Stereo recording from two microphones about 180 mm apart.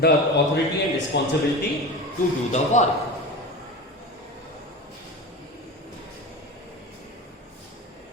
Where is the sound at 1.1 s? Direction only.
75° left (ahead or behind).